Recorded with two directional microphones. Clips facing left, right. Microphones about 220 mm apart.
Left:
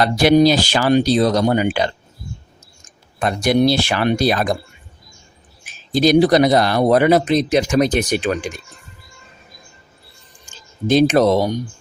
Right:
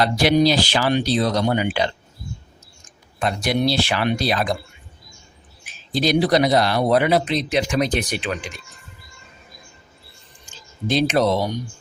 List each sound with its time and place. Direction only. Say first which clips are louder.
0.0 s speech: left 4 dB; 45° left (ahead or behind)
3.2 s speech: left 5 dB; 50° left (ahead or behind)
5.6 s speech: left 6 dB; 45° left (ahead or behind)
10.8 s speech: left 5 dB; 45° left (ahead or behind)